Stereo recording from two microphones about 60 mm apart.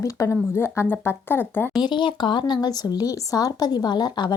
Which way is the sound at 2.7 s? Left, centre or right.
Left.